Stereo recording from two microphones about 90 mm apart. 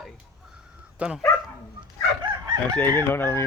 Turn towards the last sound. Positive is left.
turn(degrees=25)  # may be behind; listen again after turning